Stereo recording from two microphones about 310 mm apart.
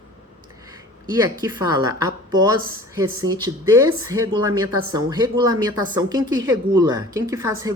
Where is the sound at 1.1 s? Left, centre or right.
Centre.